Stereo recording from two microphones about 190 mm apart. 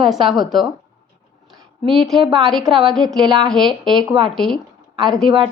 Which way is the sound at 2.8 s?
Centre (ahead or behind).